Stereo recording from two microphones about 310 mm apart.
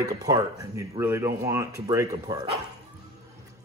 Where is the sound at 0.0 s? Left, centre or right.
Centre.